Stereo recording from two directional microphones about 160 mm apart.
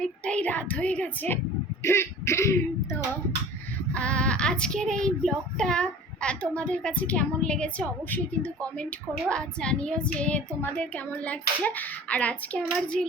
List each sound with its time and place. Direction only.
0.0 s child singing: 5° left (ahead or behind)
3.9 s child singing: 5° left (ahead or behind)